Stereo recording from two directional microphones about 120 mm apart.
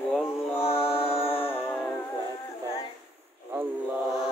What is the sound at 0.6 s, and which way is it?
Music, 55° left (ahead or behind).